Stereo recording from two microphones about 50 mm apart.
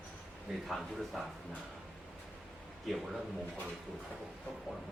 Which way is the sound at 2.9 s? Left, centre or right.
Centre.